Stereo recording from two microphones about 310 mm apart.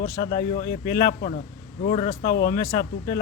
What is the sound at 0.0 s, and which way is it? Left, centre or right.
Speech, left.